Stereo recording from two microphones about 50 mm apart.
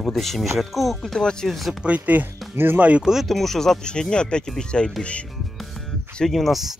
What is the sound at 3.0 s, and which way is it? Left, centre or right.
Speech, centre.